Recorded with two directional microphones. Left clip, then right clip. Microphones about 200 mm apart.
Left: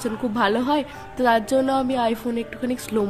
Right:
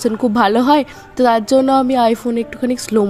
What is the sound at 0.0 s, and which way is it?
A woman's voice, 30° right (ahead or behind).